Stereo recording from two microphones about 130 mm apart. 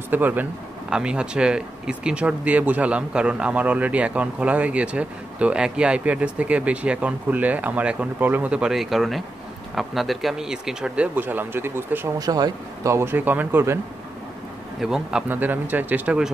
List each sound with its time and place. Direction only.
0.1 s speech: 15° right (ahead or behind)
12.2 s speech: 30° right (ahead or behind)
14.8 s speech: 5° right (ahead or behind)